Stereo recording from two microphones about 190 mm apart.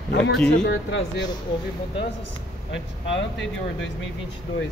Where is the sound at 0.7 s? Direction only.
70° left (ahead or behind).